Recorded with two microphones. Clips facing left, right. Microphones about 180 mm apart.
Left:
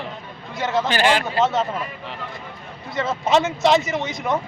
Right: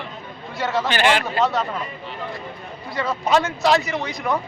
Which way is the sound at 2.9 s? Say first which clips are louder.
Left 1 dB; 20° left (ahead or behind).